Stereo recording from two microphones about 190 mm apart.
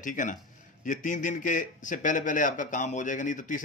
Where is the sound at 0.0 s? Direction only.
45° left (ahead or behind).